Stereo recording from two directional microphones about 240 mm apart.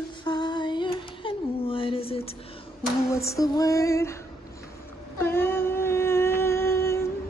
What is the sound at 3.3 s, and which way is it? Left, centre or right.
Music, centre.